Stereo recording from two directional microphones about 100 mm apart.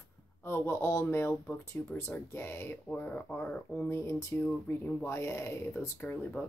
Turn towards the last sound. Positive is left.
turn(degrees=15)  # may be behind; listen again after turning